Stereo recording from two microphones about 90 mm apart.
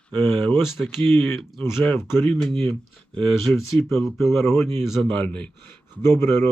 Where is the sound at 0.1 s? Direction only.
20° left (ahead or behind).